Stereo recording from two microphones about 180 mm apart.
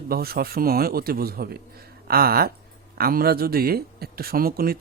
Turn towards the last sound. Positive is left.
turn(degrees=-55)  # may be behind; listen again after turning